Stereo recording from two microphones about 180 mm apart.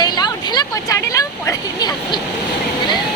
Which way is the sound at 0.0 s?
25° left (ahead or behind).